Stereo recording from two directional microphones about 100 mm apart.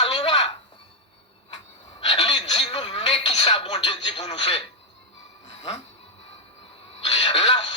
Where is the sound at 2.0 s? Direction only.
60° left (ahead or behind).